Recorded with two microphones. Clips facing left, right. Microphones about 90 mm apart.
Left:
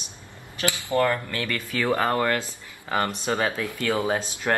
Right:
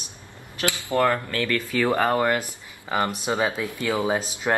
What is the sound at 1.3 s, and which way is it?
Speech, 15° left (ahead or behind).